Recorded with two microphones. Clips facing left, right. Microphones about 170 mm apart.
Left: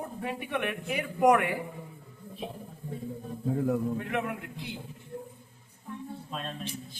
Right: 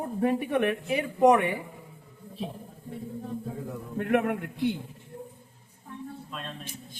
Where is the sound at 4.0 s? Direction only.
55° right (ahead or behind).